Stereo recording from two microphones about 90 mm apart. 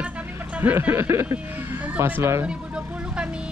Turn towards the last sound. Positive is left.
turn(degrees=-10)  # may be behind; listen again after turning